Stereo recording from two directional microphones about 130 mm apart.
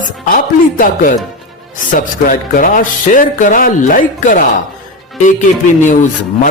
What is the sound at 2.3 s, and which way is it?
Speech, 90° left.